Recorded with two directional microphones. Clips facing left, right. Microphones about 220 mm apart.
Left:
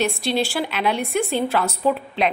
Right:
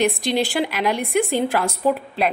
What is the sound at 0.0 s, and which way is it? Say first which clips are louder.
A woman's voice: right 2 dB; 15° right (ahead or behind).